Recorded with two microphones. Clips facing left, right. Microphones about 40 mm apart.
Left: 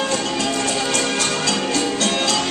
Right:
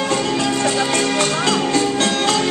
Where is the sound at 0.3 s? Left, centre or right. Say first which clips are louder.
Right 3 dB; right.